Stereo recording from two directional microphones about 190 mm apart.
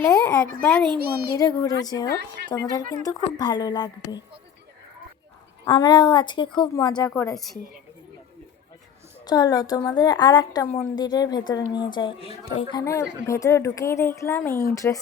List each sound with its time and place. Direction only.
0.0 s speech: 15° left (ahead or behind)
0.6 s speech: 5° left (ahead or behind)
0.9 s speech: 55° right (ahead or behind)
1.4 s a woman's voice: 20° left (ahead or behind)
2.0 s speech: 60° right (ahead or behind)
2.9 s a woman's voice: 20° left (ahead or behind)
5.6 s a woman's voice: 20° left (ahead or behind)
9.2 s a woman's voice: 20° left (ahead or behind)
12.8 s speech: 15° left (ahead or behind)